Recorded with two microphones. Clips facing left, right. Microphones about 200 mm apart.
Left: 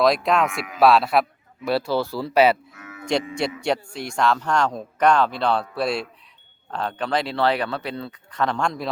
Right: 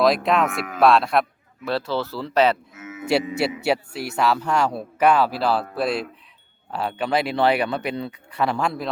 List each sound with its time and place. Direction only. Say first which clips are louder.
0.0 s cattle: even; centre (ahead or behind)
1.6 s speech: left 2 dB; 10° left (ahead or behind)
2.7 s cattle: right 5 dB; 20° right (ahead or behind)
3.6 s speech: right 1 dB; 5° right (ahead or behind)
5.7 s cattle: right 1 dB; centre (ahead or behind)
6.7 s speech: right 1 dB; 5° right (ahead or behind)